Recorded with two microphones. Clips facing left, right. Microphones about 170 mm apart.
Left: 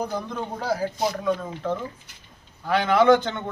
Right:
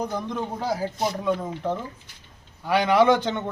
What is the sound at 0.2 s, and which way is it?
A man's voice, 20° right (ahead or behind).